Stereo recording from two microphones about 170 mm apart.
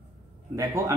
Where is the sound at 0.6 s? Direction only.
20° right (ahead or behind).